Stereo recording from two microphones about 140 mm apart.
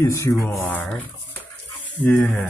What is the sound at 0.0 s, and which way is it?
Speech, 20° left (ahead or behind).